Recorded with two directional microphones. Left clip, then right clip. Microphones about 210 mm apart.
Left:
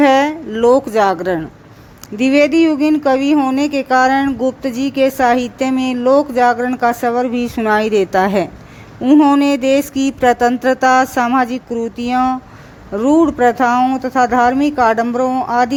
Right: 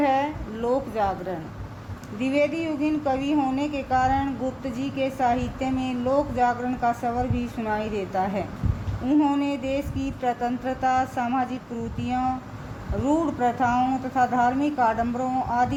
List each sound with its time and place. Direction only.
0.0 s a woman's voice: 55° left (ahead or behind)